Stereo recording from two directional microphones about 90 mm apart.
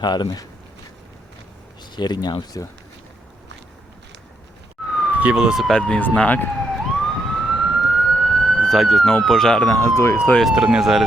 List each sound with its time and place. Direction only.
0.0 s speech: 50° left (ahead or behind)
1.8 s speech: 55° left (ahead or behind)
4.8 s police car: 5° left (ahead or behind)
5.1 s speech: 10° right (ahead or behind)
5.7 s speech: 10° left (ahead or behind)
6.7 s emergency vehicle: 5° left (ahead or behind)
9.1 s speech: 5° left (ahead or behind)
9.6 s speech: 25° left (ahead or behind)
10.4 s speech: 5° right (ahead or behind)